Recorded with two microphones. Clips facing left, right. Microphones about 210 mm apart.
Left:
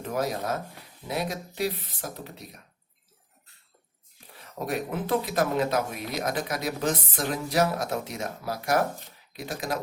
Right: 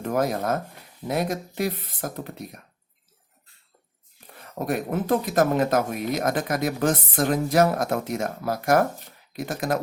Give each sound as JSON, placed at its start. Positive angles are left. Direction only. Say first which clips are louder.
{"t": 0.0, "sound": "speech", "louder": "right 5 dB", "side_deg": -50}
{"t": 4.4, "sound": "speech", "louder": "right 4 dB", "side_deg": -50}